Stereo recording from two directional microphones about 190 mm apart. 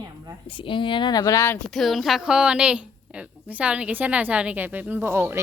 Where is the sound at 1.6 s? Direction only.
Centre (ahead or behind).